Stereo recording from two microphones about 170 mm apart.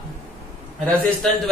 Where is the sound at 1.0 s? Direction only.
5° left (ahead or behind).